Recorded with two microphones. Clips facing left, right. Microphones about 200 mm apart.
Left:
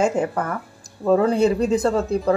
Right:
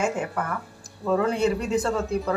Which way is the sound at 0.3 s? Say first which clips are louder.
Left 4 dB; 40° left (ahead or behind).